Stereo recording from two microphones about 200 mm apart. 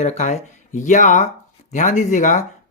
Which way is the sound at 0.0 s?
35° left (ahead or behind).